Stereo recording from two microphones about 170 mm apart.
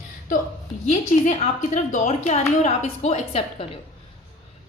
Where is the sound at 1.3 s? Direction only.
50° left (ahead or behind).